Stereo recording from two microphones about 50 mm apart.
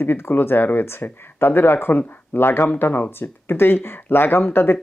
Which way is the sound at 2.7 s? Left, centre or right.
Left.